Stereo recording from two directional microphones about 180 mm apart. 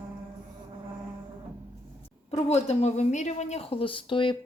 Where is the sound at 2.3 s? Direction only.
35° left (ahead or behind).